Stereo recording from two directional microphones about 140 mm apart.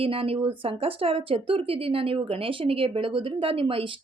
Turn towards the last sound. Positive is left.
turn(degrees=-40)  # may be behind; listen again after turning